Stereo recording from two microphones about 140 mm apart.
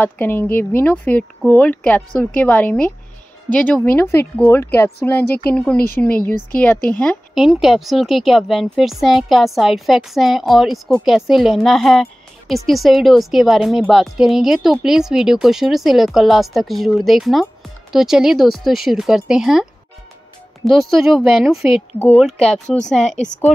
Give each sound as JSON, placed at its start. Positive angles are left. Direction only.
{"t": 0.0, "sound": "a woman's voice", "side_deg": 15}
{"t": 21.9, "sound": "speech", "side_deg": 15}
{"t": 22.2, "sound": "a woman's voice", "side_deg": 0}